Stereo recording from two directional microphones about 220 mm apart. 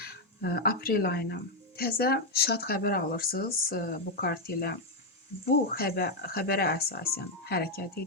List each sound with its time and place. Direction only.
0.0 s speech: 45° left (ahead or behind)
5.7 s speech: 45° left (ahead or behind)